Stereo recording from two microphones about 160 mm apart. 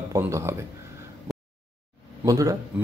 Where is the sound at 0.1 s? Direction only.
15° right (ahead or behind).